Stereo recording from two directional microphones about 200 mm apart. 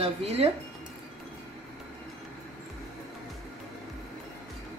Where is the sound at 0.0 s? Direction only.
30° right (ahead or behind).